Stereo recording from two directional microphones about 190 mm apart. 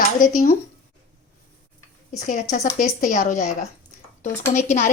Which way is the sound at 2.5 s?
40° left (ahead or behind).